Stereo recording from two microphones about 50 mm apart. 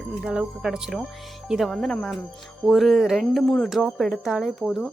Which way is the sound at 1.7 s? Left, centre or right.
Centre.